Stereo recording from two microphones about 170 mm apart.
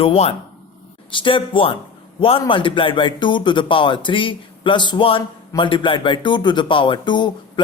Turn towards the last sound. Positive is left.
turn(degrees=25)  # may be behind; listen again after turning